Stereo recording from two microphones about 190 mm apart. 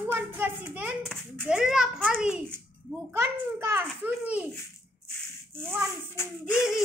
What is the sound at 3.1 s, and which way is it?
Babbling, 15° right (ahead or behind).